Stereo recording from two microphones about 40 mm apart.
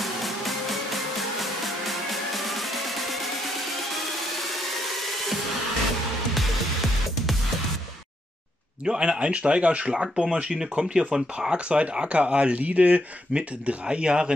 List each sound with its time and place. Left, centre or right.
0.0 s music: centre
4.4 s music: centre
8.8 s speech: right
12.5 s speech: right